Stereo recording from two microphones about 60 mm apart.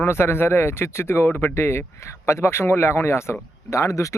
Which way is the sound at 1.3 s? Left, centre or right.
Left.